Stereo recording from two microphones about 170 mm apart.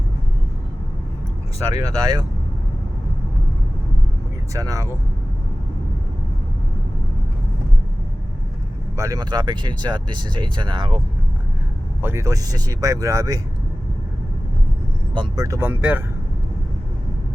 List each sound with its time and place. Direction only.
1.8 s speech: 20° right (ahead or behind)
4.5 s speech: 20° right (ahead or behind)
9.0 s speech: 20° right (ahead or behind)
12.0 s speech: 15° right (ahead or behind)
15.1 s speech: 25° right (ahead or behind); by 16.0 s 10° right (ahead or behind)